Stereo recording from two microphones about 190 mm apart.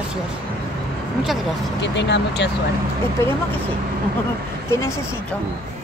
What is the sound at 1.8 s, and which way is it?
Speech, 65° left (ahead or behind).